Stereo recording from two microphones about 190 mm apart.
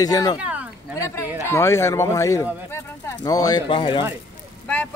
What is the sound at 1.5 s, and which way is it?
Speech, 15° left (ahead or behind).